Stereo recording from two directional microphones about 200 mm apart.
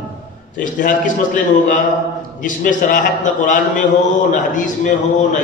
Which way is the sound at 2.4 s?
40° left (ahead or behind).